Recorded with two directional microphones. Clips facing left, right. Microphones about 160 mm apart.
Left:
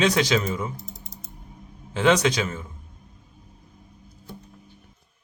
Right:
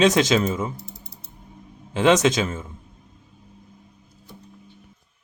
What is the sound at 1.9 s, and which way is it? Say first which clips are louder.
Speech: right 3 dB; 20° right (ahead or behind).